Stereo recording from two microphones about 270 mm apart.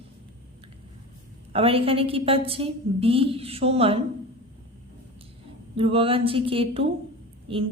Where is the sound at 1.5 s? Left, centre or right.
Right.